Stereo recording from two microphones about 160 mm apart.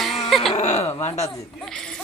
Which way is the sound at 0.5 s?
45° left (ahead or behind).